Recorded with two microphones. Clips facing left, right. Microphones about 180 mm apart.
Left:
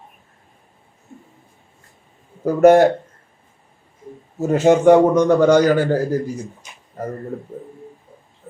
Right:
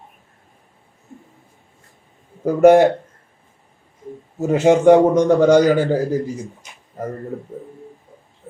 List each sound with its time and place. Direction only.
2.4 s a man's voice: 15° right (ahead or behind)
4.4 s a man's voice: 15° right (ahead or behind)